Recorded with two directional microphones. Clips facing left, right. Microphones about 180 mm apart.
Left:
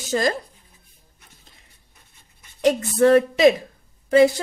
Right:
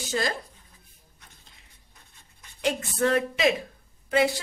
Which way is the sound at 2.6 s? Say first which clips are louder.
Left 8 dB; 40° left (ahead or behind).